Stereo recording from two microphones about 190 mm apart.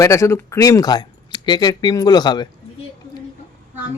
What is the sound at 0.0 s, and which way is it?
Speech, 15° left (ahead or behind).